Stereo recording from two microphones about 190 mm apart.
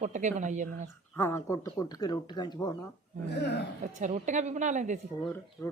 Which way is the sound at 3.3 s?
60° left (ahead or behind).